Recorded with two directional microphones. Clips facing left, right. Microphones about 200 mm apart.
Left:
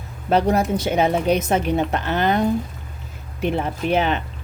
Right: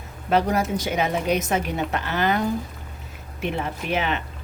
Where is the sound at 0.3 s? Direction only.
30° left (ahead or behind).